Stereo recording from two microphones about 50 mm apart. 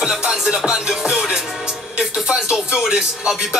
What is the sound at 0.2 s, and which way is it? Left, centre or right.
Music, centre.